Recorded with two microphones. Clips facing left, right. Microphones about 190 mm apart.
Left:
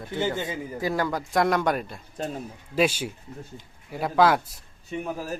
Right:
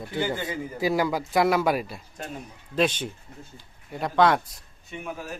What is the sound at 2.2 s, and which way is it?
Speech, 35° left (ahead or behind).